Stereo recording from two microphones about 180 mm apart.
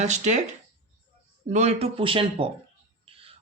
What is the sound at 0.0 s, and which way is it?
Speech, 40° right (ahead or behind).